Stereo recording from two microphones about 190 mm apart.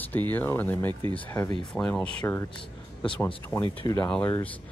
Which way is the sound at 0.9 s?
25° right (ahead or behind).